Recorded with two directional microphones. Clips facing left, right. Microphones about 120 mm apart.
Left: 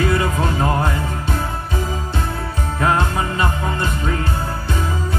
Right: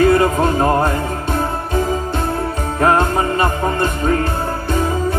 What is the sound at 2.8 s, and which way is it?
Music, 50° right (ahead or behind).